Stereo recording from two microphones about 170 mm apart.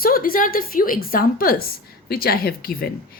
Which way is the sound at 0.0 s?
60° left (ahead or behind).